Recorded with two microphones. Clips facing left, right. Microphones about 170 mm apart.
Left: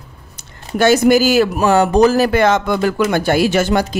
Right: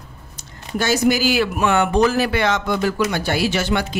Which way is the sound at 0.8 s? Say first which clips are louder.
Left 7 dB; 55° left (ahead or behind).